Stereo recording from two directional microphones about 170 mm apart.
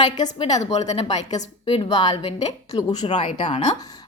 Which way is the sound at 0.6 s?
40° left (ahead or behind).